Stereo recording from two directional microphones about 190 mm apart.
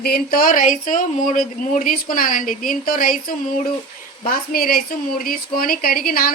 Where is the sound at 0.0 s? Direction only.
55° left (ahead or behind).